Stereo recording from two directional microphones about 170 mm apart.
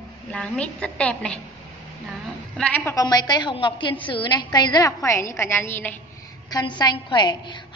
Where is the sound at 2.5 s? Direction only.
10° left (ahead or behind).